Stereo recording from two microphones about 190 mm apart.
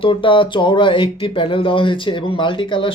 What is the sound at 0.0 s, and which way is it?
Speech, 25° left (ahead or behind).